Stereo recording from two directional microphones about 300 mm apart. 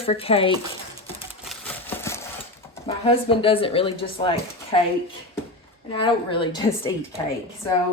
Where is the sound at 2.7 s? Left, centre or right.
Centre.